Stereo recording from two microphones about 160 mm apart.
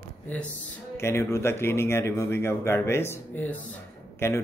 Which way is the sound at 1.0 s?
15° left (ahead or behind).